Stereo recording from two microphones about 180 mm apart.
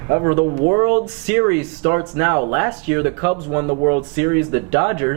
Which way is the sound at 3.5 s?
30° right (ahead or behind).